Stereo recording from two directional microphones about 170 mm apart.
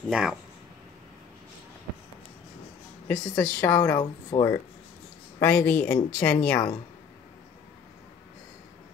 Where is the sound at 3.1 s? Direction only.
10° left (ahead or behind).